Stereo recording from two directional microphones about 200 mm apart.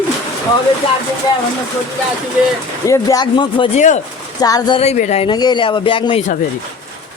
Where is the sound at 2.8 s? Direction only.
15° left (ahead or behind).